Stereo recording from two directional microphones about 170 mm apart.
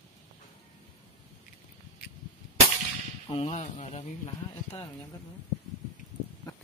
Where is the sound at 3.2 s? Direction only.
35° left (ahead or behind).